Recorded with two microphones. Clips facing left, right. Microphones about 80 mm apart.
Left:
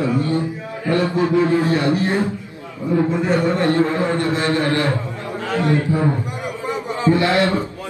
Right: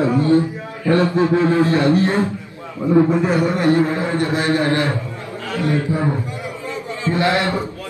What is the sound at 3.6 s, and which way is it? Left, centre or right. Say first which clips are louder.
A man's voice: right 1 dB; centre.